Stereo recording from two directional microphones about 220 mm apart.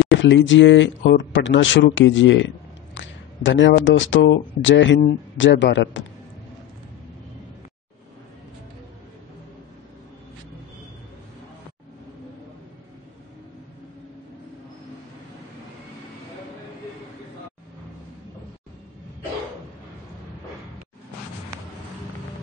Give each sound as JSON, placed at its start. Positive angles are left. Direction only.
{"t": 0.1, "sound": "speech", "side_deg": 55}